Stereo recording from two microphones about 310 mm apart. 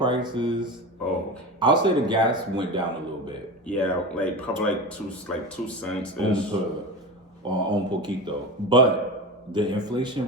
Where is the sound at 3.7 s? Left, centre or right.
Centre.